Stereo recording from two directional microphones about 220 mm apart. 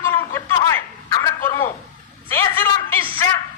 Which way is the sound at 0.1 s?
10° left (ahead or behind).